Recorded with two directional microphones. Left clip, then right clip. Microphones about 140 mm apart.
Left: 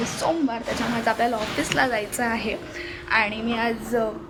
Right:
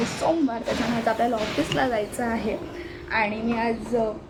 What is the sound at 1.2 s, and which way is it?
A woman's voice, 15° right (ahead or behind).